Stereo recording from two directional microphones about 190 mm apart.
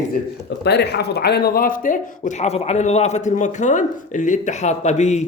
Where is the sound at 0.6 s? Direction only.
60° left (ahead or behind); by 5.3 s 35° left (ahead or behind).